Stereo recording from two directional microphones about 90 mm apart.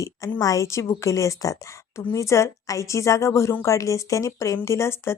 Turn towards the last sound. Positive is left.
turn(degrees=30)  # may be behind; listen again after turning